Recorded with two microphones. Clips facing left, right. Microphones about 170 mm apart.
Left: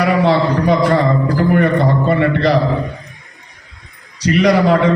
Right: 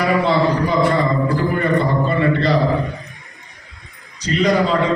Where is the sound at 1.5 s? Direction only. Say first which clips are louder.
Left 4 dB; 65° left (ahead or behind).